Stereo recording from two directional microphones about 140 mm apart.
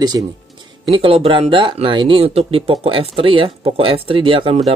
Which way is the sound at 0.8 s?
40° right (ahead or behind).